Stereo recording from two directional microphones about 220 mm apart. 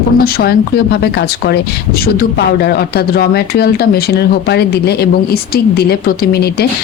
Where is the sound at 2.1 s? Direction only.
45° left (ahead or behind).